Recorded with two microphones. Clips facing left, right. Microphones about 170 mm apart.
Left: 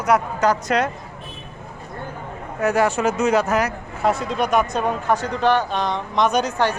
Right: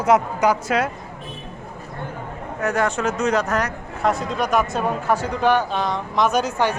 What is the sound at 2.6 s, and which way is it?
Speech, 5° left (ahead or behind).